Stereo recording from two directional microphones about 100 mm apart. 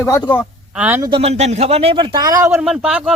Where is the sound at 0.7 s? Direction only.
15° right (ahead or behind).